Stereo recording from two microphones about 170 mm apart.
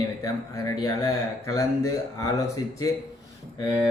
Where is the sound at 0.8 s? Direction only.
20° left (ahead or behind).